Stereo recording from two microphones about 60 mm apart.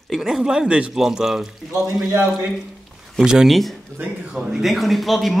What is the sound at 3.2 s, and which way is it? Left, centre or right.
Speech, centre.